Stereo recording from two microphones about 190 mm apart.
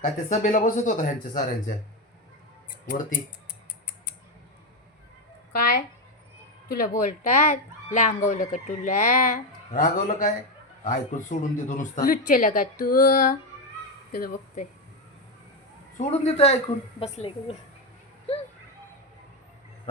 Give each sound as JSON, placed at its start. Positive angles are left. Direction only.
{"t": 0.0, "sound": "speech", "side_deg": 40}
{"t": 5.5, "sound": "speech", "side_deg": 50}
{"t": 16.0, "sound": "speech", "side_deg": 30}